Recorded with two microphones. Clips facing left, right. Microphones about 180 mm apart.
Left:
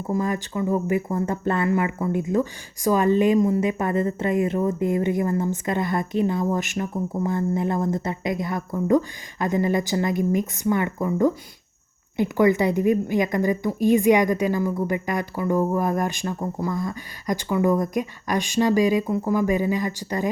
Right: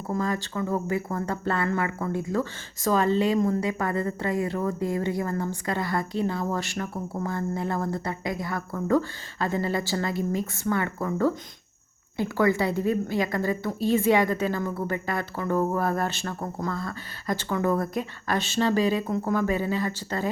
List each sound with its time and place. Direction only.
0.1 s speech: 15° left (ahead or behind)